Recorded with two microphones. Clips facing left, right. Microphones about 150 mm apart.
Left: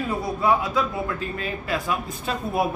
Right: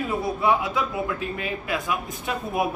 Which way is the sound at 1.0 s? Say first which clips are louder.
Even; 15° right (ahead or behind).